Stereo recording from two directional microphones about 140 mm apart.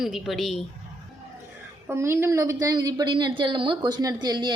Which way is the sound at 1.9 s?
20° right (ahead or behind).